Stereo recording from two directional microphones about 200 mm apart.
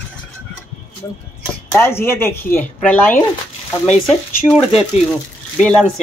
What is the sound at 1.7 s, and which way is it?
Speech, 10° left (ahead or behind).